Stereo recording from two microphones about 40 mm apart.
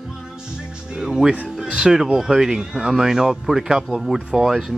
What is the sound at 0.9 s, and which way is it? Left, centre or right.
Speech, centre.